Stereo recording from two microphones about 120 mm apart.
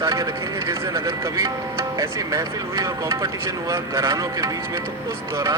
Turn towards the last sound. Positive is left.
turn(degrees=-25)  # may be behind; listen again after turning